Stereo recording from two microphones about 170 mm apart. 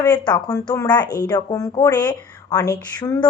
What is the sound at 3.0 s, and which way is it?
Speech, 20° left (ahead or behind).